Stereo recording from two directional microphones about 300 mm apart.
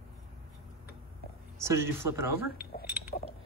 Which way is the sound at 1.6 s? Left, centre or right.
Centre.